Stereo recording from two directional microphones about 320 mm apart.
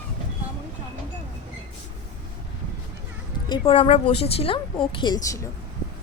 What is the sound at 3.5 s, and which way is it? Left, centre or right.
A woman's voice, centre.